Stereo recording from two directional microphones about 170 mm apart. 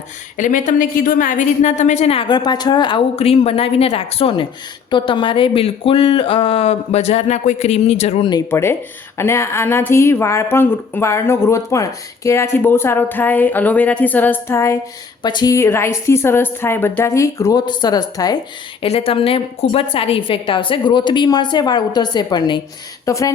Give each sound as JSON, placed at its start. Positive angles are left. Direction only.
{"t": 0.3, "sound": "a woman's voice", "side_deg": 50}
{"t": 8.3, "sound": "a woman's voice", "side_deg": 20}
{"t": 18.8, "sound": "a woman's voice", "side_deg": 35}